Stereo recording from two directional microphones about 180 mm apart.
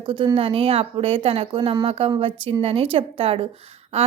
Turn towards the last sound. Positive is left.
turn(degrees=-35)  # may be behind; listen again after turning